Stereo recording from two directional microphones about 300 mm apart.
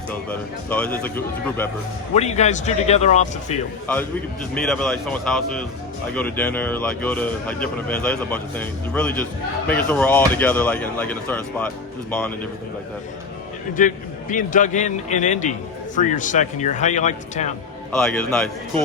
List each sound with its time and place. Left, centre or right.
0.3 s speech: centre
2.1 s a man's voice: left
3.9 s speech: centre
13.7 s a man's voice: left
17.9 s speech: centre